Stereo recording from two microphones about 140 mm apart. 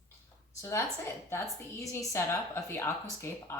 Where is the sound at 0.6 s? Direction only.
20° left (ahead or behind).